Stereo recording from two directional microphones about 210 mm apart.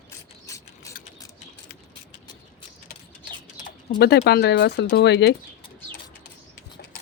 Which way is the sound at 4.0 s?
50° left (ahead or behind).